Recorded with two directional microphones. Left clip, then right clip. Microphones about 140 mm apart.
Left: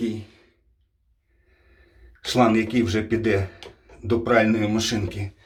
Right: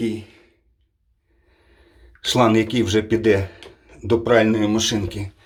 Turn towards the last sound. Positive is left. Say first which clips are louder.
# right 4 dB
turn(degrees=-35)  # may be behind; listen again after turning